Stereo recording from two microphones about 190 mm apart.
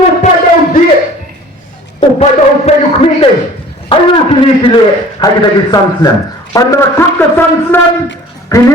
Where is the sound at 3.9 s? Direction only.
25° left (ahead or behind); by 7.8 s 10° left (ahead or behind).